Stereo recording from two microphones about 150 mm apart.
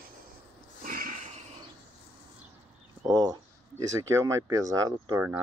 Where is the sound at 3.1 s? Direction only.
25° right (ahead or behind).